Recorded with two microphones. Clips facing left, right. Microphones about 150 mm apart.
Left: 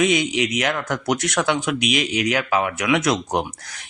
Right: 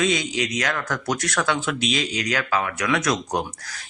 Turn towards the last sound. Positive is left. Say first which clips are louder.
# left 3 dB
turn(degrees=25)  # may be behind; listen again after turning